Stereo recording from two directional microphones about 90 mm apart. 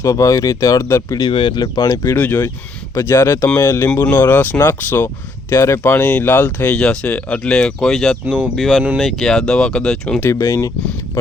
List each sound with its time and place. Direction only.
0.0 s speech: 35° left (ahead or behind)
1.3 s speech: 65° left (ahead or behind)
1.6 s speech: 45° left (ahead or behind)
2.0 s speech: 20° left (ahead or behind)
5.8 s speech: 15° left (ahead or behind)
10.2 s speech: 30° left (ahead or behind)